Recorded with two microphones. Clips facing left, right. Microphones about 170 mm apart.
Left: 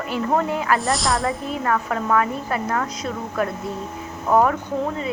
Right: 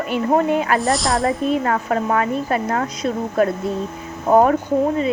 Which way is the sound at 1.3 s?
25° right (ahead or behind).